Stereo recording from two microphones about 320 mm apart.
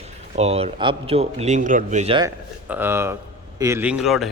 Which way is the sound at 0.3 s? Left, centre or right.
Centre.